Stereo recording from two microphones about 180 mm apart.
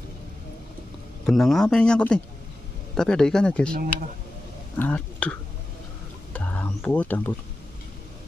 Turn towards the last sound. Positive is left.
turn(degrees=10)  # may be behind; listen again after turning